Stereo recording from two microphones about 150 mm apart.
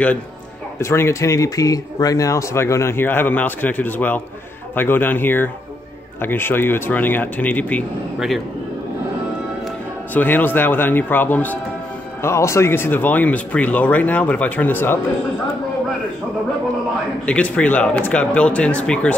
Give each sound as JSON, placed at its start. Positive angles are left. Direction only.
{"t": 0.7, "sound": "speech", "side_deg": 20}
{"t": 10.1, "sound": "speech", "side_deg": 15}
{"t": 17.3, "sound": "speech", "side_deg": 10}